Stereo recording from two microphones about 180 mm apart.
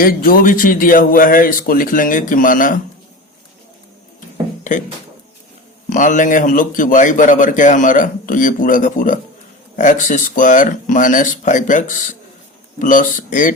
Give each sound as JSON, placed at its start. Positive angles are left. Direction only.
{"t": 0.0, "sound": "a man's voice", "side_deg": 55}
{"t": 5.9, "sound": "a man's voice", "side_deg": 45}